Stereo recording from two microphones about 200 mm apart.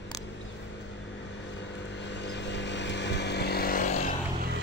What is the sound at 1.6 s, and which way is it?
Vehicle, 60° left (ahead or behind).